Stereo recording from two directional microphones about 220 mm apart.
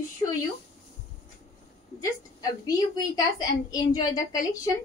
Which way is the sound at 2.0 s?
15° left (ahead or behind).